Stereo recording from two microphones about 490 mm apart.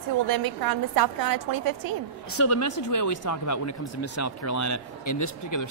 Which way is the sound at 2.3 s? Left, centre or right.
Left.